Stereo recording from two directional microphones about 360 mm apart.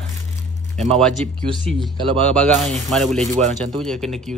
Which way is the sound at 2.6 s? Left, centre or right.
Centre.